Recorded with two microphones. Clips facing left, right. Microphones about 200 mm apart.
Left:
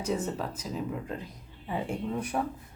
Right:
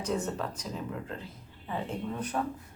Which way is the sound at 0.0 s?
10° left (ahead or behind).